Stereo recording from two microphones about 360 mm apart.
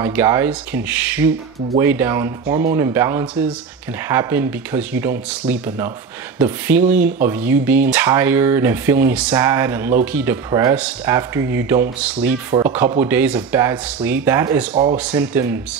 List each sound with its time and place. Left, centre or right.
0.0 s speech: centre
12.4 s speech: centre